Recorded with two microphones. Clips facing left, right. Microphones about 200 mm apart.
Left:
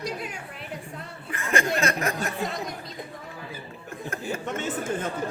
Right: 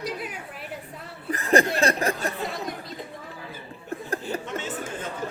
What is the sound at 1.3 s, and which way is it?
Speech, 35° right (ahead or behind).